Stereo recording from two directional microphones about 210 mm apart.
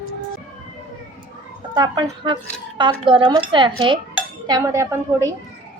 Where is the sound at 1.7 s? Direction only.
20° right (ahead or behind).